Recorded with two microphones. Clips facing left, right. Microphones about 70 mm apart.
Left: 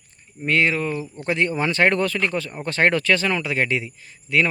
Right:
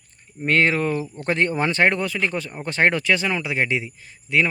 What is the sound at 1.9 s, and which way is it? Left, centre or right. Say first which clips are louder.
Speech: left 2 dB; centre.